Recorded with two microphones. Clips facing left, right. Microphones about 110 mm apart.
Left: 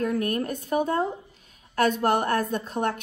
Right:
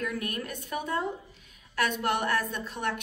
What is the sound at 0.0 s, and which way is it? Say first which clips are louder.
A woman's voice: left 8 dB; 40° left (ahead or behind).